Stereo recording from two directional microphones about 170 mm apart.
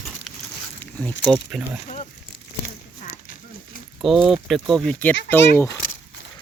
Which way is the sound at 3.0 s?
50° left (ahead or behind).